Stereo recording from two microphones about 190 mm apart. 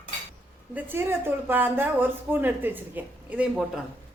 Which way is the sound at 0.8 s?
10° right (ahead or behind).